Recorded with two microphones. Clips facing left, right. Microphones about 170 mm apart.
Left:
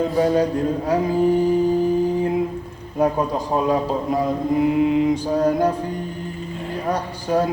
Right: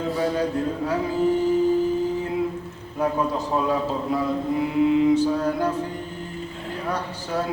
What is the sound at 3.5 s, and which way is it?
A man's voice, 40° left (ahead or behind).